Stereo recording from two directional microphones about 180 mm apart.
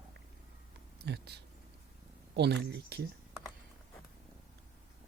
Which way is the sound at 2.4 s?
65° right (ahead or behind).